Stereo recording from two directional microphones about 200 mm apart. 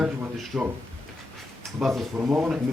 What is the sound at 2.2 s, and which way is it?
Speech, 10° right (ahead or behind).